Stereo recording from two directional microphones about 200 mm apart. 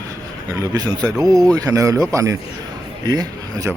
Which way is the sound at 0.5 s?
20° right (ahead or behind).